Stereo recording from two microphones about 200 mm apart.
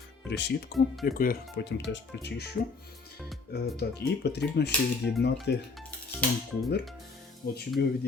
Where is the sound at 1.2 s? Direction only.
55° left (ahead or behind).